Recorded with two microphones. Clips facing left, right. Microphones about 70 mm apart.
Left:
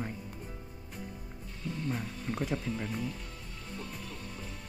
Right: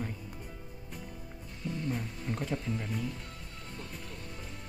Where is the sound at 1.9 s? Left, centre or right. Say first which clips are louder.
Even; centre.